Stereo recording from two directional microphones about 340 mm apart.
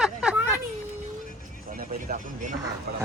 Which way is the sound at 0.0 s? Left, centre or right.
Centre.